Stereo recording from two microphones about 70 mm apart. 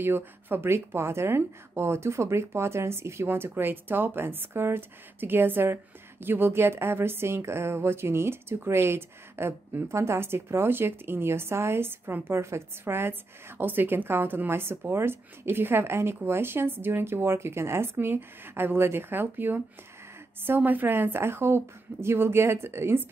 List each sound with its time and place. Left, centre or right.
0.0 s speech: right